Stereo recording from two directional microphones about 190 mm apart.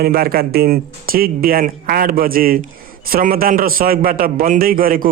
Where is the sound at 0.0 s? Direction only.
55° right (ahead or behind).